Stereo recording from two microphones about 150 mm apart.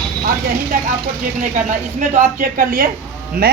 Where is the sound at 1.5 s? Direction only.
55° right (ahead or behind); by 3.5 s 75° right (ahead or behind).